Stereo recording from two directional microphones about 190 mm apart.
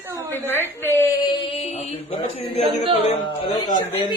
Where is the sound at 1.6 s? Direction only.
30° left (ahead or behind).